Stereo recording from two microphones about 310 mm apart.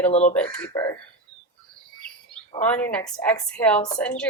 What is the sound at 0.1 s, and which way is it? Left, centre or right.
Speech, left.